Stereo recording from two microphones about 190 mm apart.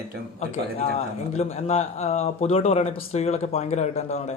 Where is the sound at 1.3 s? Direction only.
35° left (ahead or behind).